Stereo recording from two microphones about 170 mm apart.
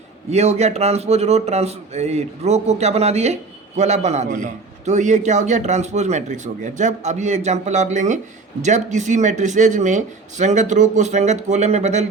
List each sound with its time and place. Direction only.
0.3 s a man's voice: 40° right (ahead or behind)